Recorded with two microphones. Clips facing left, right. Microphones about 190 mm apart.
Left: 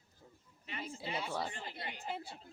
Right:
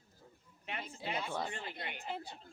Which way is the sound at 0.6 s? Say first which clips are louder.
Right 1 dB; 60° right (ahead or behind).